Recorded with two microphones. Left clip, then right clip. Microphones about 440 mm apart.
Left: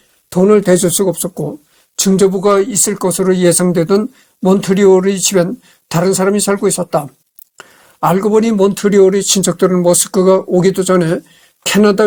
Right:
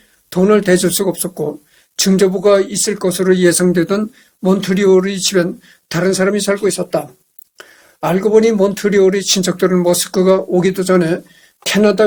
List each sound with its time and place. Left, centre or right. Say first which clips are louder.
0.3 s speech: left 2 dB; left
2.8 s speech: left 1 dB; centre